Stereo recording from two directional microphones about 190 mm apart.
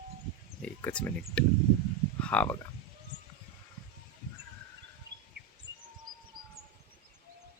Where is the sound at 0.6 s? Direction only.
5° left (ahead or behind).